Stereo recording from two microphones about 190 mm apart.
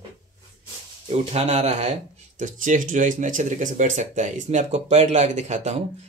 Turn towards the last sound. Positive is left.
turn(degrees=-35)  # may be behind; listen again after turning